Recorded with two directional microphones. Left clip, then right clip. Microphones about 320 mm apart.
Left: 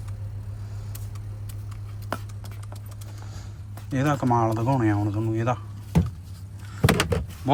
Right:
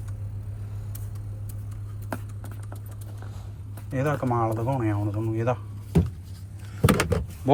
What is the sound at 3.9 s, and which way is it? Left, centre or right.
Speech, centre.